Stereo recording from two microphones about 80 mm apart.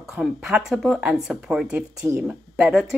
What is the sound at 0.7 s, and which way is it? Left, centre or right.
Speech, centre.